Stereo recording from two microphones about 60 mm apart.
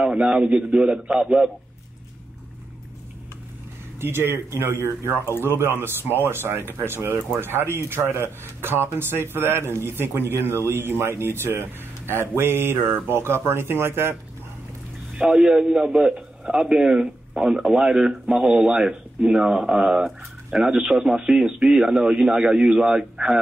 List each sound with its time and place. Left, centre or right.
0.0 s a man's voice: centre
4.0 s speech: right
15.1 s a man's voice: centre